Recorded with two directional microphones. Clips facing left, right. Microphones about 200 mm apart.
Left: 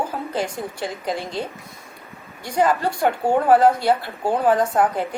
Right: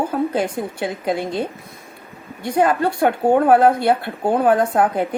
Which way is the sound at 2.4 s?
55° right (ahead or behind).